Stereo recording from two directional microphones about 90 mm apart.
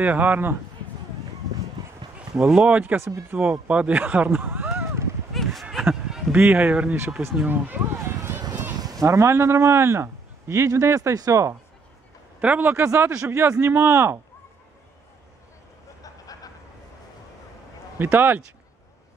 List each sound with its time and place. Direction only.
0.0 s speech: 20° right (ahead or behind)
2.1 s speech: 10° right (ahead or behind)
2.8 s speech: 25° right (ahead or behind)
3.1 s speech: 35° right (ahead or behind)
3.6 s speech: 15° right (ahead or behind)
5.3 s a sound: centre (ahead or behind)
6.3 s speech: 20° right (ahead or behind)
8.2 s a sound: 25° right (ahead or behind)
8.7 s speech: 45° right (ahead or behind)
12.4 s speech: 15° right (ahead or behind)
17.9 s speech: 20° right (ahead or behind)